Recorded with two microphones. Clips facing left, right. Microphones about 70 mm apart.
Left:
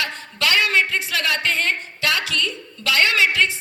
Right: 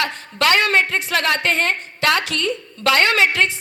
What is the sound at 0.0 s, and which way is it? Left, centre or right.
A woman's voice, right.